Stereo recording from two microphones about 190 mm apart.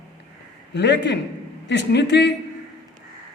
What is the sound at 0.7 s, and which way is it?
A man's voice, 65° left (ahead or behind).